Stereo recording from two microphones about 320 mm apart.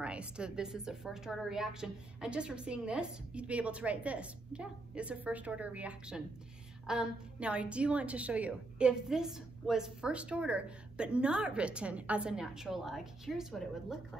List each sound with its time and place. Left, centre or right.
0.0 s a woman's voice: centre